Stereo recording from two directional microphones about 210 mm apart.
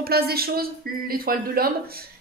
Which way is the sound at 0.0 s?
45° right (ahead or behind).